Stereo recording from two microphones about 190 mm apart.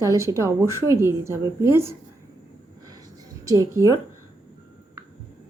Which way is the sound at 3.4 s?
15° right (ahead or behind).